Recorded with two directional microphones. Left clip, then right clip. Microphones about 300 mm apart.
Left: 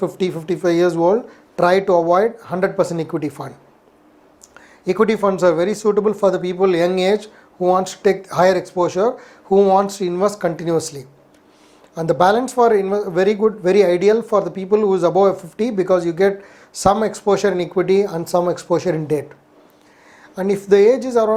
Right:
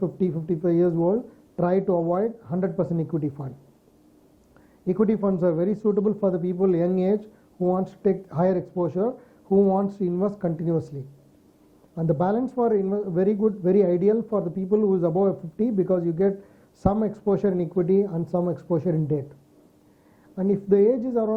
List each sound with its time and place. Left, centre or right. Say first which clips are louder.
0.2 s speech: left 6 dB; centre
1.9 s speech: left 9 dB; left
2.1 s speech: left 9 dB; centre
4.5 s a man's voice: left 7 dB; centre
12.2 s speech: left 11 dB; centre
20.3 s speech: left 7 dB; centre